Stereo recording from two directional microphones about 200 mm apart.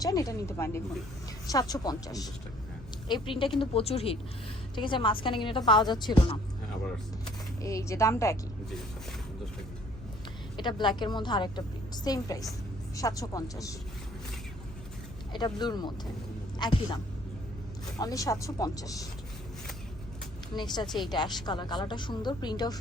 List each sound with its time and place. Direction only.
0.0 s a woman's voice: 20° left (ahead or behind)
7.6 s speech: 15° left (ahead or behind)
10.6 s a woman's voice: 20° left (ahead or behind)
15.3 s a woman's voice: 20° left (ahead or behind)
18.0 s speech: 15° left (ahead or behind)
20.8 s speech: centre (ahead or behind)
21.1 s a woman's voice: 20° left (ahead or behind)